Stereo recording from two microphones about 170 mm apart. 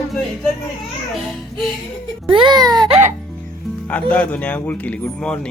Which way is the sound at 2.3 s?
25° right (ahead or behind).